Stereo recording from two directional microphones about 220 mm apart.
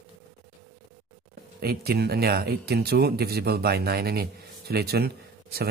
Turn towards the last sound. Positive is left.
turn(degrees=-45)  # may be behind; listen again after turning